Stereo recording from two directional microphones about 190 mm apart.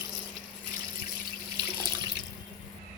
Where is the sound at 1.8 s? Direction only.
20° right (ahead or behind).